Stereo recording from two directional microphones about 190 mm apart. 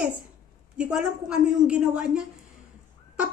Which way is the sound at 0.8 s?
5° right (ahead or behind).